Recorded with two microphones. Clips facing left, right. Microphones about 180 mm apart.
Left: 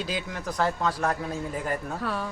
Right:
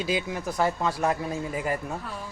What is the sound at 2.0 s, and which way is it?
Speech, 70° left (ahead or behind).